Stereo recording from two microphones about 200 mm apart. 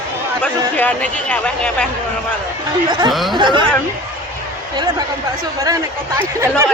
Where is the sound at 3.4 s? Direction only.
25° right (ahead or behind).